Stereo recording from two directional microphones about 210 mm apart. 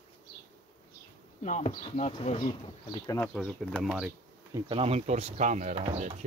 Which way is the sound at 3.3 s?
Centre (ahead or behind).